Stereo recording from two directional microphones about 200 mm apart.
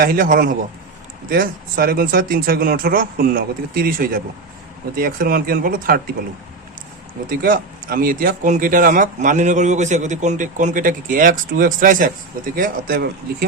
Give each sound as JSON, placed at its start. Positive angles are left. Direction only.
{"t": 0.0, "sound": "speech", "side_deg": -45}
{"t": 7.3, "sound": "speech", "side_deg": -45}